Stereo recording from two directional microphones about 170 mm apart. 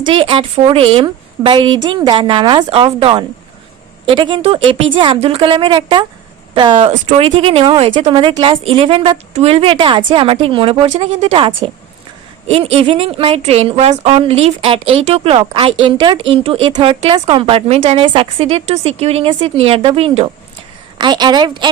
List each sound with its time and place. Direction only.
0.0 s a woman's voice: 30° right (ahead or behind)